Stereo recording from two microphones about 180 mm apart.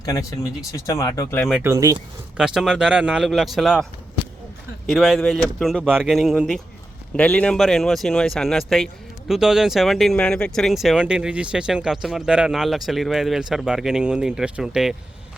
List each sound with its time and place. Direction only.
0.0 s speech: 20° left (ahead or behind)
1.6 s speech: 15° right (ahead or behind)
2.4 s speech: centre (ahead or behind)
4.9 s speech: centre (ahead or behind)